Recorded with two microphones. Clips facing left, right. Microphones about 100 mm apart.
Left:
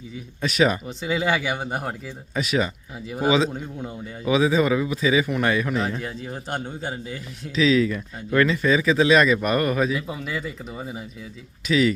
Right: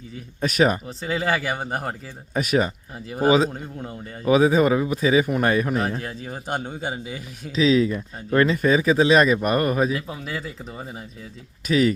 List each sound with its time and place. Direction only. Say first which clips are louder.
0.4 s speech: right 1 dB; 45° right (ahead or behind)
0.9 s a man's voice: left 1 dB; centre (ahead or behind)
2.3 s speech: right 2 dB; 45° right (ahead or behind)
3.5 s a man's voice: left 1 dB; centre (ahead or behind)
4.3 s speech: right 3 dB; 45° right (ahead or behind)
6.0 s a man's voice: left 1 dB; centre (ahead or behind)
7.5 s speech: right 1 dB; 35° right (ahead or behind)
8.5 s speech: right 1 dB; 40° right (ahead or behind)
9.9 s a man's voice: left 1 dB; centre (ahead or behind)
11.7 s speech: right 1 dB; 40° right (ahead or behind)